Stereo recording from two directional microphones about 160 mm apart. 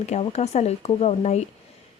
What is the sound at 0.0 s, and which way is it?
A woman's voice, 45° left (ahead or behind).